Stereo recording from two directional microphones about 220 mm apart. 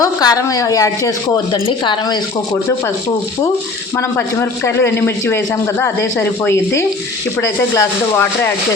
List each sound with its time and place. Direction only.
0.0 s a man's voice: 15° left (ahead or behind)
3.9 s a man's voice: 10° left (ahead or behind)